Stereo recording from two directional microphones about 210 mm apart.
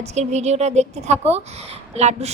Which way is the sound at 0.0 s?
30° right (ahead or behind).